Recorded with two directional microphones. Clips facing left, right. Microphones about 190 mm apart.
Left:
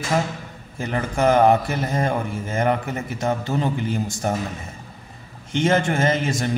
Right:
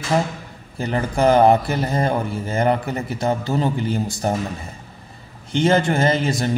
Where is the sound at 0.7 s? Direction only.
35° right (ahead or behind).